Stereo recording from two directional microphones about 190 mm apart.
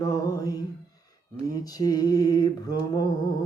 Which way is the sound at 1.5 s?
20° left (ahead or behind).